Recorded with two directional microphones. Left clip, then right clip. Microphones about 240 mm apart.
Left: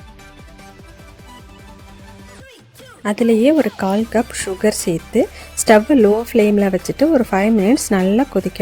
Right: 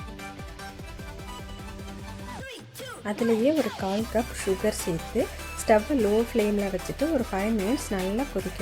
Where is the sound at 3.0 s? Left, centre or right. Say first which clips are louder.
Left 10 dB; left.